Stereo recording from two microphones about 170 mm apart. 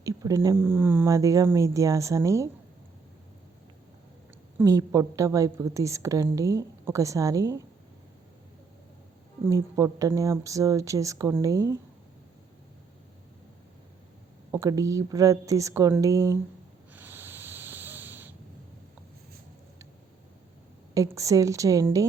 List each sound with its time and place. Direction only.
0.0 s speech: 20° right (ahead or behind)
4.5 s a woman's voice: 20° right (ahead or behind)
9.4 s a woman's voice: 15° right (ahead or behind)
14.5 s a woman's voice: 20° right (ahead or behind)
16.9 s snort: 10° right (ahead or behind)
20.9 s a woman's voice: 20° right (ahead or behind)